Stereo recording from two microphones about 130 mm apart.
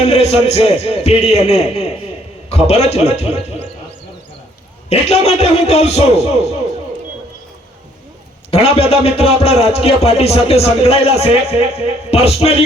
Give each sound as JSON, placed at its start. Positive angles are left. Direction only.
{"t": 0.1, "sound": "a man's voice", "side_deg": 55}
{"t": 4.9, "sound": "a man's voice", "side_deg": 55}
{"t": 8.4, "sound": "a man's voice", "side_deg": 50}